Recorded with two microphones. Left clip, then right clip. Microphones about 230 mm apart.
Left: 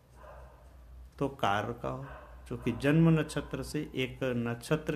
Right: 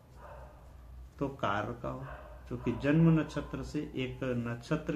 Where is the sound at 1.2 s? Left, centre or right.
Left.